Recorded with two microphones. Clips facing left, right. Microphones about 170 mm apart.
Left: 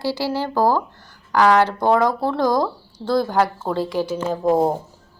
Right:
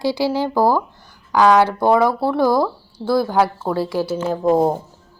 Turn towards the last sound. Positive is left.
turn(degrees=-10)  # may be behind; listen again after turning